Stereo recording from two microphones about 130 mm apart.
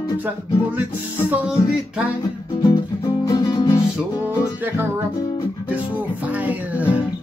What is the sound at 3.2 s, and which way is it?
Music, 30° left (ahead or behind).